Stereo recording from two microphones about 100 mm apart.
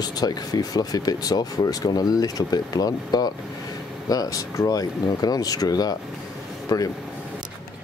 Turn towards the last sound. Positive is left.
turn(degrees=40)  # may be behind; listen again after turning